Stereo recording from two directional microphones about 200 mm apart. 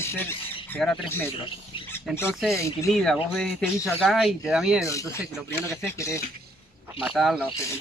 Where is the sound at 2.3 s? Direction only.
Centre (ahead or behind).